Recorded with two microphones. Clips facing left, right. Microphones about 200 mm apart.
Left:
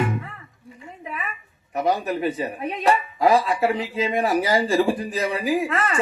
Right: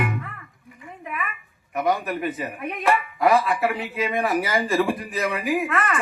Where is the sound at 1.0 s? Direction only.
30° left (ahead or behind).